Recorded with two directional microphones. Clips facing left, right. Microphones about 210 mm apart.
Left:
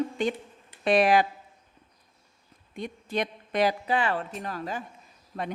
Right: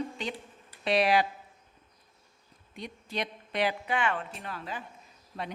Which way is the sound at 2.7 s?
50° left (ahead or behind).